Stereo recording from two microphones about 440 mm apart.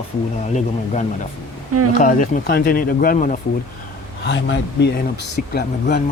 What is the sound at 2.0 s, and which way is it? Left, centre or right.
Speech, centre.